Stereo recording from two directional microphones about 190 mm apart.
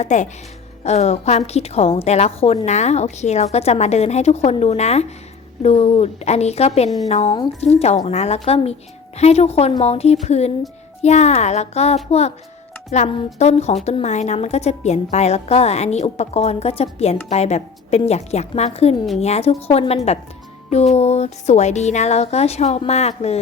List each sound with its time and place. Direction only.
0.0 s a woman's voice: 40° left (ahead or behind)